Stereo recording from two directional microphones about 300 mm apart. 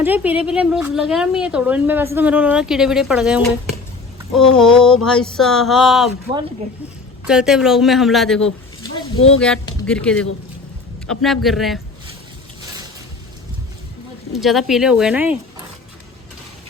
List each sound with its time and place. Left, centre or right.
0.0 s a woman's voice: centre
7.3 s a woman's voice: centre
9.1 s speech: left
9.8 s a woman's voice: centre
14.3 s a woman's voice: centre